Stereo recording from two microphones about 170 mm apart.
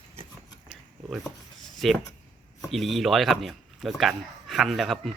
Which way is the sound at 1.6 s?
Centre (ahead or behind).